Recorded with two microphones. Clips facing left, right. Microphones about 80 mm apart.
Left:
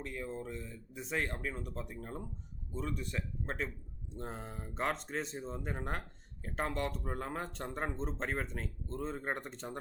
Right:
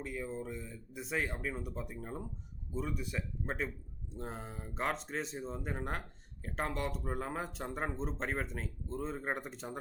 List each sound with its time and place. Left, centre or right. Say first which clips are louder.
0.0 s speech: right 1 dB; centre